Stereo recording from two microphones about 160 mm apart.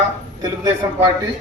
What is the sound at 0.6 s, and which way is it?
Speech, 20° right (ahead or behind).